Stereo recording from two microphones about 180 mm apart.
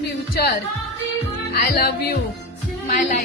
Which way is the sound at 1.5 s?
60° left (ahead or behind).